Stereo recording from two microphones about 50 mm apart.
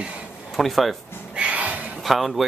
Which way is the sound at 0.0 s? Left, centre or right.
Right.